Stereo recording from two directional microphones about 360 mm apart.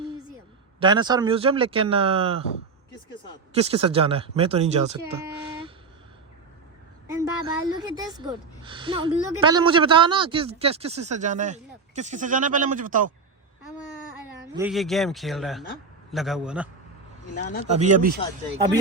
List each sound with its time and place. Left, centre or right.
0.8 s a woman's voice: centre
3.5 s a woman's voice: centre
5.5 s vehicle: centre
7.1 s a woman's voice: centre
14.5 s speech: centre
17.7 s speech: centre